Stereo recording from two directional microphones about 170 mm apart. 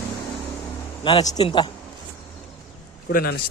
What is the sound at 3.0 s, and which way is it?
Speech, 65° left (ahead or behind).